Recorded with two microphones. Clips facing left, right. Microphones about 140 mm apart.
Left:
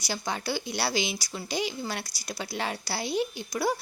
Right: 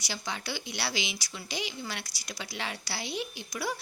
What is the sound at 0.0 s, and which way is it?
A woman's voice, 45° left (ahead or behind).